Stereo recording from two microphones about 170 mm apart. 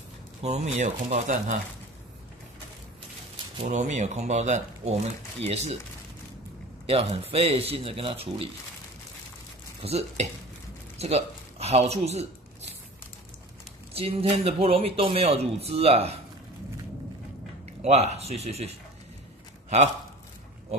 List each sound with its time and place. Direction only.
0.4 s speech: 40° right (ahead or behind)
3.6 s speech: 45° right (ahead or behind)
6.9 s speech: 35° right (ahead or behind)
9.8 s speech: 40° right (ahead or behind)
11.0 s a sound: 40° right (ahead or behind)
13.9 s speech: 35° right (ahead or behind)
17.8 s speech: 40° right (ahead or behind)